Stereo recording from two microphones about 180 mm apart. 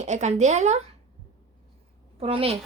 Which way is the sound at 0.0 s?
40° right (ahead or behind).